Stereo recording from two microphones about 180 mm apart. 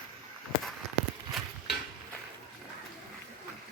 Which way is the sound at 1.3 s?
Centre (ahead or behind).